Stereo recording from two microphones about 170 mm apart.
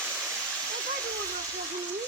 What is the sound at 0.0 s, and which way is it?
Waterfall, 5° left (ahead or behind).